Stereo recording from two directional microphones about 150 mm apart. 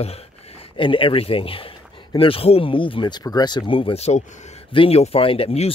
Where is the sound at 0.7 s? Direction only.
35° left (ahead or behind).